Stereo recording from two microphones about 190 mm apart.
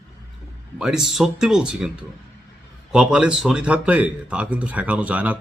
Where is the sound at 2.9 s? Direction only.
5° right (ahead or behind).